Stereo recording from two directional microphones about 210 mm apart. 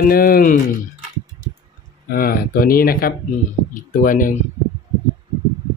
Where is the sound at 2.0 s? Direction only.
45° left (ahead or behind).